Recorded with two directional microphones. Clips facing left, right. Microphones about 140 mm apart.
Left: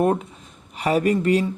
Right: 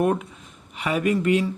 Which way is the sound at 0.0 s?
30° left (ahead or behind).